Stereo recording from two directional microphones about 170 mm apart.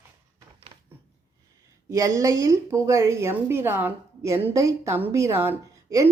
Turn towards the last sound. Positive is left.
turn(degrees=-15)  # may be behind; listen again after turning